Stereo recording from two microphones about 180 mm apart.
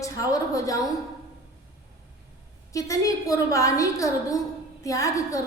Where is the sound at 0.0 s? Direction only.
20° left (ahead or behind).